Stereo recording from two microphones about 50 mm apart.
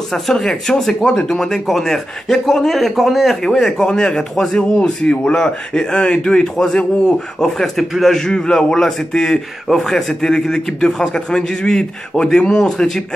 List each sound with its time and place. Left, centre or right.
0.1 s a man's voice: centre